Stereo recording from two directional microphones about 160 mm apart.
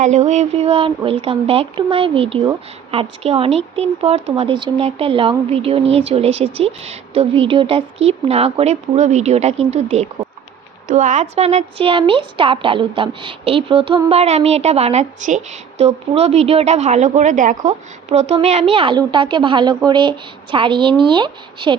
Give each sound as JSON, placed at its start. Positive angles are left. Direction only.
{"t": 0.0, "sound": "speech", "side_deg": -45}